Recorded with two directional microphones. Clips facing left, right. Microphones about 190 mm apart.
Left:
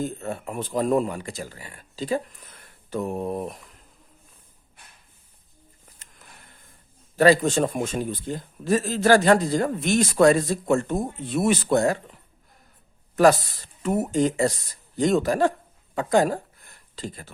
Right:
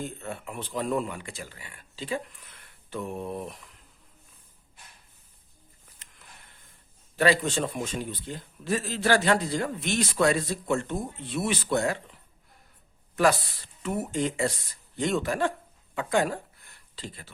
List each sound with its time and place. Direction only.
0.0 s speech: 40° left (ahead or behind)
7.2 s a man's voice: 45° left (ahead or behind)
13.1 s speech: 40° left (ahead or behind)